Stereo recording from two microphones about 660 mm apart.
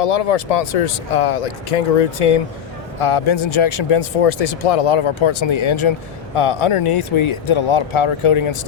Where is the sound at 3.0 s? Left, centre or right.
Left.